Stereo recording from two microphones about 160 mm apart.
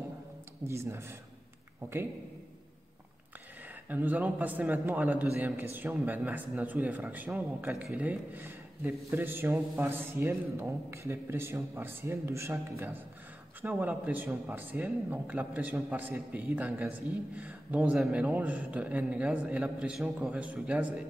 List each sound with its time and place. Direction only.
0.7 s a man's voice: 15° right (ahead or behind)
3.9 s a man's voice: 10° right (ahead or behind)